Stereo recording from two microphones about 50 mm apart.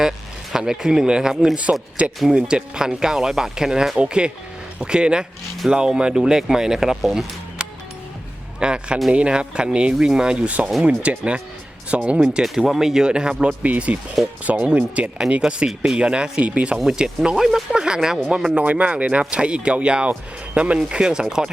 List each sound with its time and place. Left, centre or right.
0.5 s speech: centre
2.0 s speech: right; by 7.3 s centre
8.6 s speech: centre
16.7 s speech: centre
18.6 s speech: right